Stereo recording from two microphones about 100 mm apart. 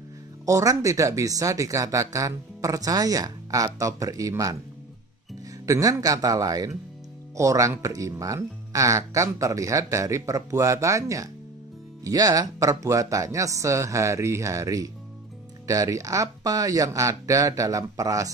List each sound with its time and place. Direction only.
0.5 s speech: 35° right (ahead or behind)
5.7 s speech: 35° right (ahead or behind)